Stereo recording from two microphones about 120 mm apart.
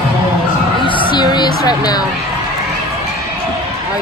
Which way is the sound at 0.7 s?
45° left (ahead or behind).